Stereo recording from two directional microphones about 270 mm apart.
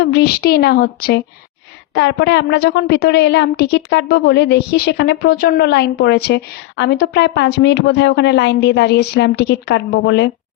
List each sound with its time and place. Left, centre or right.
0.0 s a woman's voice: left